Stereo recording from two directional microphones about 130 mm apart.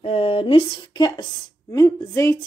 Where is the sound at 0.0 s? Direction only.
50° left (ahead or behind).